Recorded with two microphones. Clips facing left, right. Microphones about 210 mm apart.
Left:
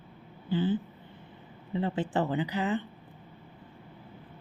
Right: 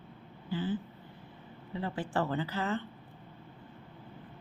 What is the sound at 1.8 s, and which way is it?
Speech, 25° left (ahead or behind).